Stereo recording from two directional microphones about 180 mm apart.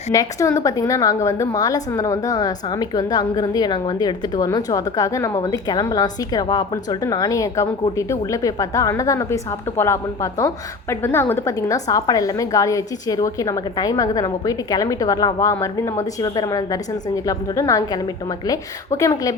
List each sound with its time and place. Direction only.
0.1 s a woman's voice: 20° left (ahead or behind)